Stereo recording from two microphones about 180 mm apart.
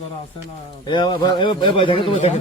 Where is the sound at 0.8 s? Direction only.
25° left (ahead or behind).